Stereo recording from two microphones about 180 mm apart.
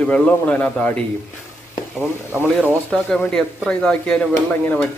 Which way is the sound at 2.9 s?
5° left (ahead or behind).